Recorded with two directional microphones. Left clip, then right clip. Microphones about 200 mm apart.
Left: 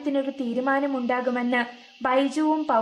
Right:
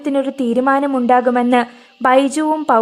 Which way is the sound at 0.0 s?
55° right (ahead or behind).